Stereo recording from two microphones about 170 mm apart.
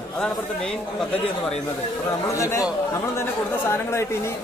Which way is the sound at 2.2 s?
20° left (ahead or behind).